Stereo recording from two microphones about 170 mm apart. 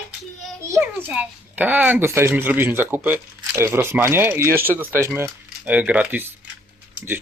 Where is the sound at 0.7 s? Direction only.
10° right (ahead or behind).